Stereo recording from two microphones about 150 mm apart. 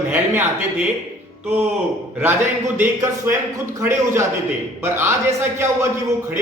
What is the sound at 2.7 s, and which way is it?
A man's voice, 15° right (ahead or behind).